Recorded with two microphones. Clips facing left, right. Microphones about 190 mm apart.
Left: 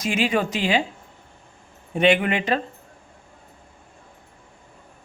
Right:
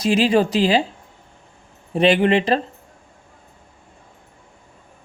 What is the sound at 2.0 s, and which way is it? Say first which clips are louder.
Speech: right 4 dB; 35° right (ahead or behind).